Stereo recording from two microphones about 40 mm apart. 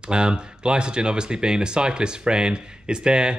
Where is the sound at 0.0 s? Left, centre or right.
Right.